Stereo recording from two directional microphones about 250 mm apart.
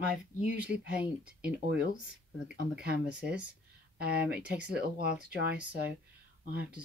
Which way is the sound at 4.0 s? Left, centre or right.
Right.